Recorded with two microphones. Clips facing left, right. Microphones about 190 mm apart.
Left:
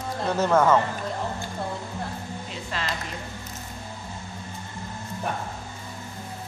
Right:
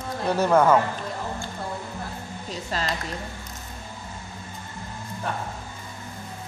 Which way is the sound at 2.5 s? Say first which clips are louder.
Right 4 dB; 40° right (ahead or behind).